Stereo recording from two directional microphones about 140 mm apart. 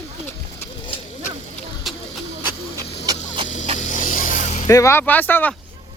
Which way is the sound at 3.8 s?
65° left (ahead or behind).